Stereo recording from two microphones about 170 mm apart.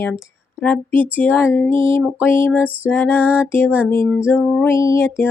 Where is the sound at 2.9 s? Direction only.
10° left (ahead or behind).